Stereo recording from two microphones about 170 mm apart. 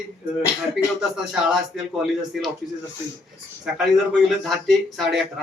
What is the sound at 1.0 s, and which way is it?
A man's voice, centre (ahead or behind).